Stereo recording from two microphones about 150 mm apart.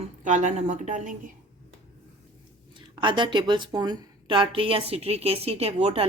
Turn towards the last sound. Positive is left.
turn(degrees=-45)  # may be behind; listen again after turning